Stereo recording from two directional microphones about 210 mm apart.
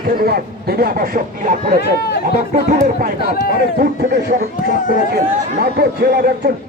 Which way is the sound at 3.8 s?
45° right (ahead or behind).